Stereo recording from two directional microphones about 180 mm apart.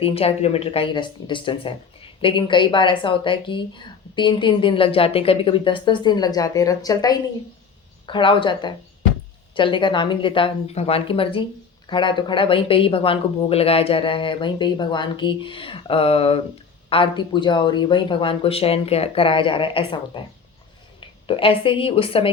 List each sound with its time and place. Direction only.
0.0 s a woman's voice: 35° left (ahead or behind)
21.2 s speech: 30° left (ahead or behind)